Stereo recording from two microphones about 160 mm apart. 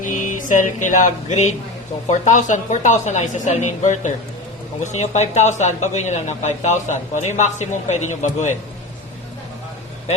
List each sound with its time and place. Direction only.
0.0 s music: 55° left (ahead or behind)
2.0 s speech: 50° left (ahead or behind)